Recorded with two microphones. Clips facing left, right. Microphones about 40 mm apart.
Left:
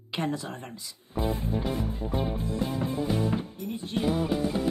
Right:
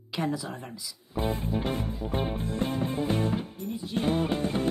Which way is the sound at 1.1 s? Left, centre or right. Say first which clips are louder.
Even; right.